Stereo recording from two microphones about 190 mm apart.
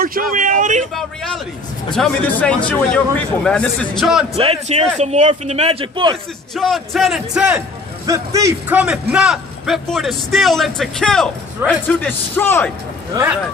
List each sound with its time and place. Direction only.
0.0 s speech: 50° right (ahead or behind)
0.9 s a man's voice: centre (ahead or behind)
4.4 s speech: 30° right (ahead or behind)
6.5 s a man's voice: centre (ahead or behind)
8.0 s speech: 20° right (ahead or behind)
8.8 s a man's voice: 5° right (ahead or behind)